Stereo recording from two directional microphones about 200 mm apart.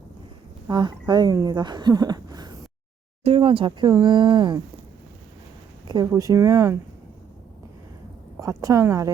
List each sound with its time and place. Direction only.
0.7 s speech: 20° right (ahead or behind)
5.9 s speech: 20° right (ahead or behind)
8.4 s speech: 15° right (ahead or behind)